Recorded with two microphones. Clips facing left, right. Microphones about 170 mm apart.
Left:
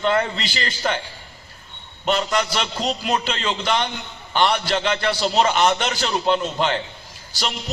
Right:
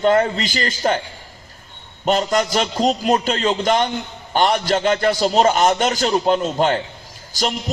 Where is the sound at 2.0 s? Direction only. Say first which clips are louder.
Right 4 dB; 45° right (ahead or behind).